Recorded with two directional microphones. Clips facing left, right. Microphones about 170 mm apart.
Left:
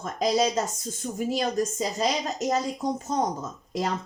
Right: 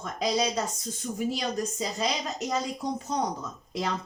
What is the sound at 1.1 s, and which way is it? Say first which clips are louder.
Speech: left 4 dB; 45° left (ahead or behind).